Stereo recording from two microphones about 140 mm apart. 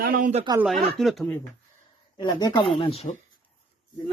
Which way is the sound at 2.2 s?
30° left (ahead or behind).